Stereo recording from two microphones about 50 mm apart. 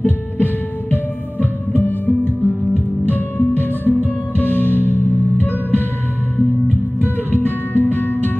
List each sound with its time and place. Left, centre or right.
0.4 s music: left